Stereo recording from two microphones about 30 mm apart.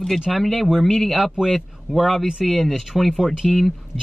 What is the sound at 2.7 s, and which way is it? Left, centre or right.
Speech, centre.